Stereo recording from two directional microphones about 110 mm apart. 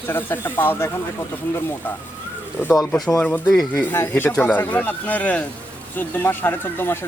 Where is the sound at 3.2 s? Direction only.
15° left (ahead or behind).